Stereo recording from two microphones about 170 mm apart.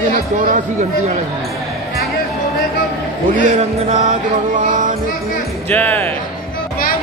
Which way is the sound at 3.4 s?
45° right (ahead or behind).